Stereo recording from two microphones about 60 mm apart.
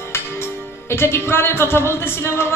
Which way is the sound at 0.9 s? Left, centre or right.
Left.